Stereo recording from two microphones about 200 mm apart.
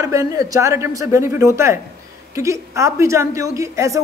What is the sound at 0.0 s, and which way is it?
Speech, 15° right (ahead or behind).